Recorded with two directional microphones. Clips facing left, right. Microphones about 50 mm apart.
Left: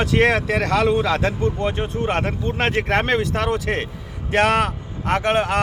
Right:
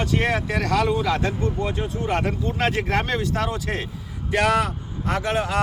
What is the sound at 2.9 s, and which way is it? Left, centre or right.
Speech, left.